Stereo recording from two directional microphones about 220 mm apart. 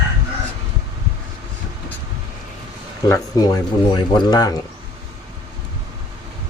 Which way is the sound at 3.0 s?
15° left (ahead or behind).